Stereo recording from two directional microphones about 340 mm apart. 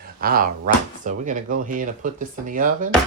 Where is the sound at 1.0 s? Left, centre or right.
Right.